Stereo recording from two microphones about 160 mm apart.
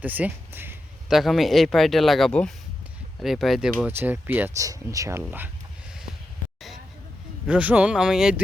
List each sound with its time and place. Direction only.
0.0 s speech: 10° right (ahead or behind)
1.0 s speech: centre (ahead or behind)
3.8 s speech: 10° right (ahead or behind)
7.4 s speech: 10° right (ahead or behind)